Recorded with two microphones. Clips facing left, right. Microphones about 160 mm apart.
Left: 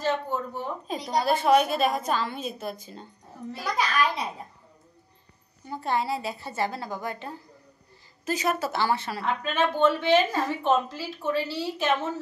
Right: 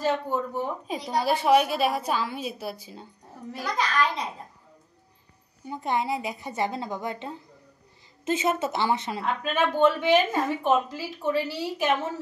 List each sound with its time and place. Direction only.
0.0 s a woman's voice: 10° right (ahead or behind)
3.6 s a child's voice: 10° left (ahead or behind)
5.7 s a woman's voice: 20° right (ahead or behind)